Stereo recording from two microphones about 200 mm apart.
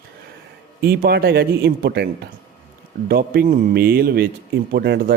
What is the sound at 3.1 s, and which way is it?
A man's voice, 45° right (ahead or behind).